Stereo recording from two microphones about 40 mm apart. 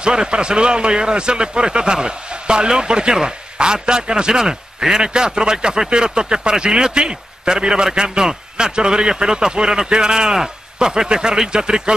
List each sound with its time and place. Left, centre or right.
0.0 s a man's voice: right